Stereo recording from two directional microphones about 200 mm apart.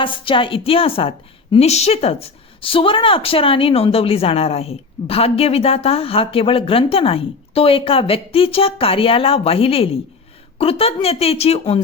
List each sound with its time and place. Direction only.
0.0 s a woman's voice: 25° left (ahead or behind)